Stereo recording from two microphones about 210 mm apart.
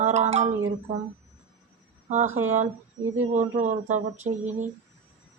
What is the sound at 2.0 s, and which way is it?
Speech, 35° right (ahead or behind).